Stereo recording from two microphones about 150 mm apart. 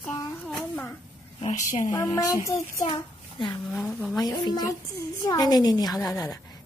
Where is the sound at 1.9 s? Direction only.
25° left (ahead or behind).